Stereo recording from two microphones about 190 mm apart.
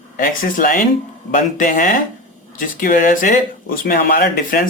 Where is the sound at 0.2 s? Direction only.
45° left (ahead or behind).